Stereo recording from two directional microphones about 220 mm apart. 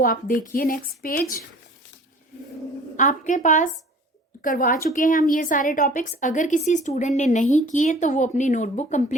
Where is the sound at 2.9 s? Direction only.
35° left (ahead or behind).